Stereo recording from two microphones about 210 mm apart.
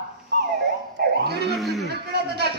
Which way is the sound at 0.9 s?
50° right (ahead or behind).